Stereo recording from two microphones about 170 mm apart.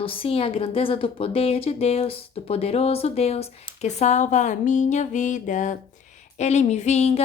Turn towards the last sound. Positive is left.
turn(degrees=40)  # may be behind; listen again after turning